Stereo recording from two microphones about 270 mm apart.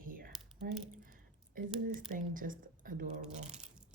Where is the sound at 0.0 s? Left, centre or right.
Right.